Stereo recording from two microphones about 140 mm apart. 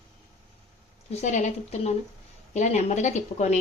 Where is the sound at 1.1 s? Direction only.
55° left (ahead or behind).